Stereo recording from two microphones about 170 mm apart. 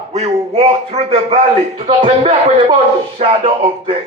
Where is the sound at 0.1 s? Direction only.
40° right (ahead or behind).